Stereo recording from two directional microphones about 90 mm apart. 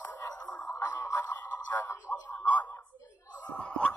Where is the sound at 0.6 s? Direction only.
25° left (ahead or behind).